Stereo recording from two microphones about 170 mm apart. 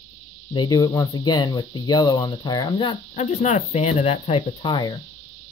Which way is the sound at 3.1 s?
40° left (ahead or behind).